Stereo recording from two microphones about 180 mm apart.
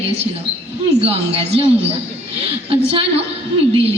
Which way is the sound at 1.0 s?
35° right (ahead or behind).